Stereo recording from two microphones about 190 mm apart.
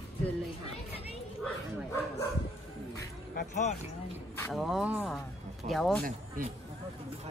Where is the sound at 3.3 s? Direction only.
40° left (ahead or behind).